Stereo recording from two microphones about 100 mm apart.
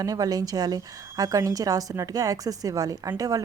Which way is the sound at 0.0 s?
40° right (ahead or behind).